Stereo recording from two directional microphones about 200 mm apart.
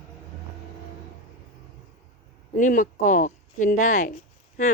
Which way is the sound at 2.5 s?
40° left (ahead or behind).